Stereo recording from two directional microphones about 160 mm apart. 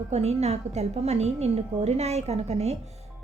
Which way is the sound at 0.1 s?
40° right (ahead or behind).